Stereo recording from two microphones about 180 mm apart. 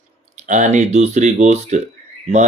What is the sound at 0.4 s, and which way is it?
Speech, 40° right (ahead or behind).